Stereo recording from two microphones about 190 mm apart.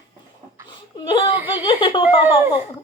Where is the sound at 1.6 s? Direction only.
25° left (ahead or behind).